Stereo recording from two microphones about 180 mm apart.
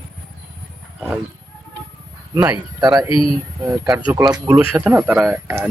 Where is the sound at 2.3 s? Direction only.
20° right (ahead or behind).